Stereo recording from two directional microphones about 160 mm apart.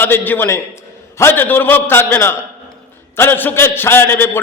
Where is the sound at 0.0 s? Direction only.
15° left (ahead or behind).